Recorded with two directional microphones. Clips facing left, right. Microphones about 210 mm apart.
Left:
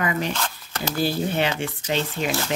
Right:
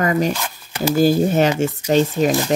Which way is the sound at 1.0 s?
45° right (ahead or behind).